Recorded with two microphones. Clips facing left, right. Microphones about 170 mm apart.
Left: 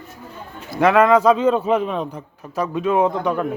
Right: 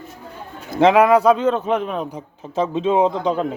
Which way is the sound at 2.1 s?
20° right (ahead or behind).